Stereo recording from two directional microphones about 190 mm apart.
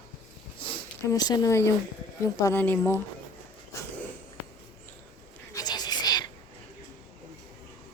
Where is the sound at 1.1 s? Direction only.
20° left (ahead or behind).